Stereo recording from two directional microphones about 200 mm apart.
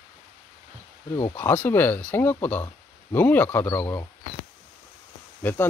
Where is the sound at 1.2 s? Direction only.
15° left (ahead or behind).